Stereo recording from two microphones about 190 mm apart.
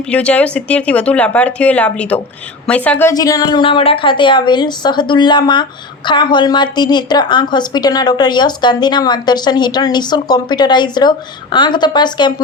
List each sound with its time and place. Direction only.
0.1 s a woman's voice: 5° left (ahead or behind); by 12.3 s 25° left (ahead or behind)